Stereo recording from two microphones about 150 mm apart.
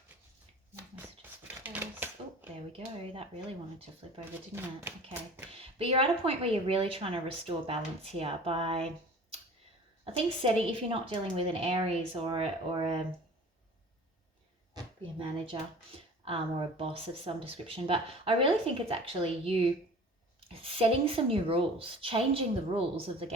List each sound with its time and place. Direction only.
1.6 s a sound: 10° right (ahead or behind)
2.7 s speech: 40° right (ahead or behind)
4.5 s speech: 15° right (ahead or behind)
5.8 s speech: 40° right (ahead or behind)
10.0 s speech: 35° right (ahead or behind)
16.2 s speech: 40° right (ahead or behind)